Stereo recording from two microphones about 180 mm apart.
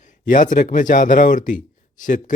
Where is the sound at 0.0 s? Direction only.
45° left (ahead or behind).